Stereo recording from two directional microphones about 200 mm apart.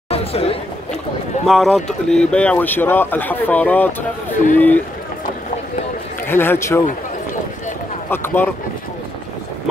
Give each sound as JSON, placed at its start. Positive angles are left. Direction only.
{"t": 0.1, "sound": "chatter", "side_deg": 30}
{"t": 1.5, "sound": "speech", "side_deg": 0}
{"t": 6.2, "sound": "speech", "side_deg": 10}
{"t": 8.1, "sound": "speech", "side_deg": 10}